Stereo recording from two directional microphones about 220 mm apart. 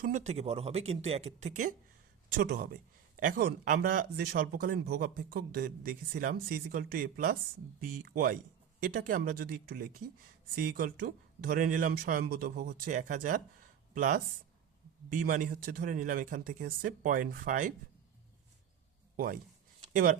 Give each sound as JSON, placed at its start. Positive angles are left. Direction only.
{"t": 0.0, "sound": "speech", "side_deg": -35}
{"t": 2.4, "sound": "speech", "side_deg": -45}
{"t": 19.1, "sound": "speech", "side_deg": -40}